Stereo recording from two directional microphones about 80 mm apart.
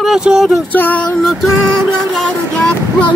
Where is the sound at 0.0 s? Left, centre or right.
Centre.